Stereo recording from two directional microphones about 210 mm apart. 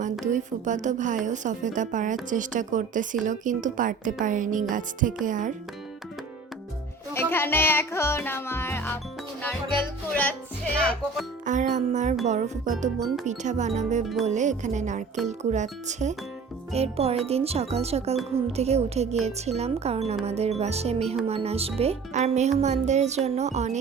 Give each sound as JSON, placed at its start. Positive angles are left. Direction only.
{"t": 0.3, "sound": "speech", "side_deg": -35}
{"t": 7.1, "sound": "music", "side_deg": 10}
{"t": 10.8, "sound": "speech", "side_deg": 5}
{"t": 11.4, "sound": "speech", "side_deg": -35}